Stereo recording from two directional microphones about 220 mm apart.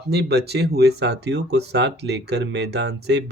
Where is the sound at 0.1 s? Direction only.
45° right (ahead or behind).